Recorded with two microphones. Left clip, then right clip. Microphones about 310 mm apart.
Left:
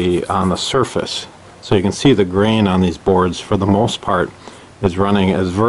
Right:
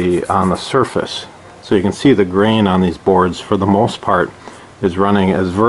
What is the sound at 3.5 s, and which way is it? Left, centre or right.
Speech, centre.